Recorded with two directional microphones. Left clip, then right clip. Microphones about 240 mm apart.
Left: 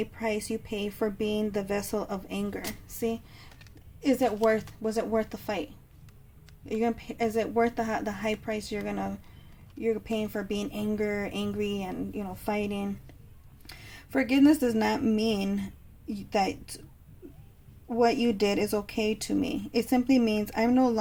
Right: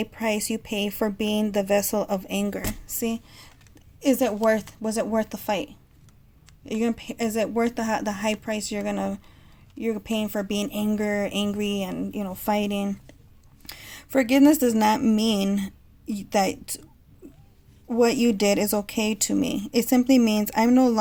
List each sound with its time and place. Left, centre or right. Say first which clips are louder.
0.0 s speech: right 4 dB; right
6.7 s speech: right 2 dB; right
17.8 s speech: right 4 dB; right